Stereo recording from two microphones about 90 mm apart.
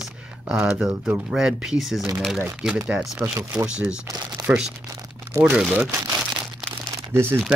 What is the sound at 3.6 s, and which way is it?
Speech, 10° right (ahead or behind).